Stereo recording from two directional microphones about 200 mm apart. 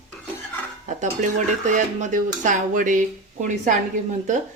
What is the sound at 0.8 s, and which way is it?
Speech, 35° right (ahead or behind).